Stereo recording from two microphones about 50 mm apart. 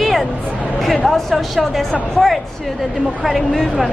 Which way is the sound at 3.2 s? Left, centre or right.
Centre.